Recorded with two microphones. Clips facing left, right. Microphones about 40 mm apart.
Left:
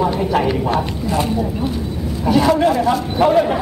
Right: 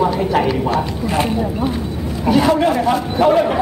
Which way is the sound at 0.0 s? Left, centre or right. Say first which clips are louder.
Right 1 dB; centre.